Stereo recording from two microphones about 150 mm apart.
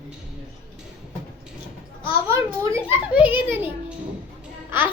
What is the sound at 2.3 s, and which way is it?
A child's voice, 15° right (ahead or behind).